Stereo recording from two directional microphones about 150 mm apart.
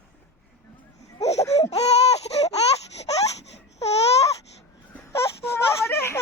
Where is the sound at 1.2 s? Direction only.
45° left (ahead or behind).